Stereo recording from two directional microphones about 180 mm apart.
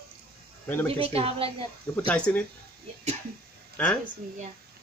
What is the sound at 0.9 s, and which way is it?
Speech, 30° right (ahead or behind).